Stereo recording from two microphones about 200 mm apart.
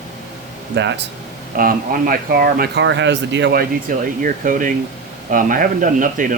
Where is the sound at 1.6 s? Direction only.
45° right (ahead or behind).